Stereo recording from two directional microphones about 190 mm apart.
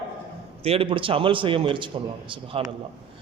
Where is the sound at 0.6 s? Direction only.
30° right (ahead or behind).